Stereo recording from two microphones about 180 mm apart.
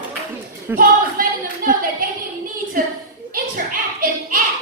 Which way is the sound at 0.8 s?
50° right (ahead or behind).